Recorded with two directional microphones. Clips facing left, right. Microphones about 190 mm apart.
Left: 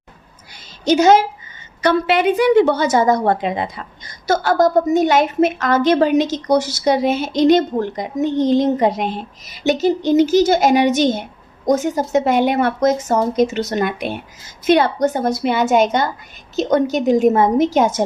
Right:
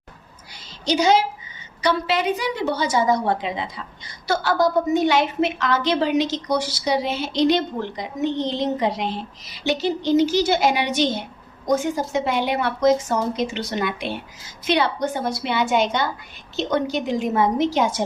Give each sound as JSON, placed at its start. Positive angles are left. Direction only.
{"t": 0.9, "sound": "a woman's voice", "side_deg": 50}